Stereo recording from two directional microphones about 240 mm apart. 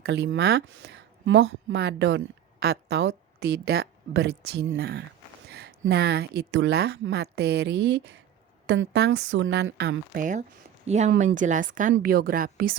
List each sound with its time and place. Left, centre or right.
0.0 s a woman's voice: right